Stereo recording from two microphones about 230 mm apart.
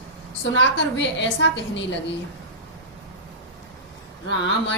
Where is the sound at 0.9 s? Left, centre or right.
Left.